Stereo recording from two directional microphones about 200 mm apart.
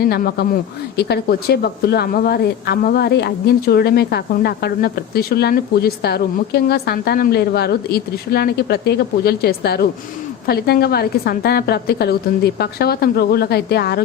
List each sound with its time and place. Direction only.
0.0 s speech: 50° left (ahead or behind)